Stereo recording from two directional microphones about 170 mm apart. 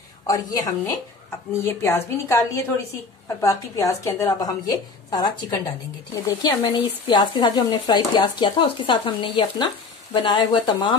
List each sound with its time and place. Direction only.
0.3 s a woman's voice: 20° left (ahead or behind)